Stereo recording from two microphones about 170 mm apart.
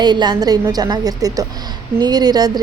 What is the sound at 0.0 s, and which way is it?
A woman's voice, 25° right (ahead or behind).